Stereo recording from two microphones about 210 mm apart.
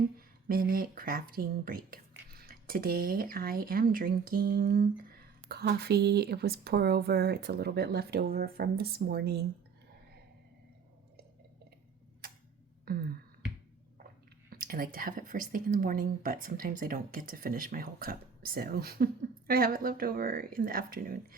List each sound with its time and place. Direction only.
0.2 s speech: 45° right (ahead or behind)
12.8 s a sound: 45° right (ahead or behind)
14.5 s speech: 45° right (ahead or behind)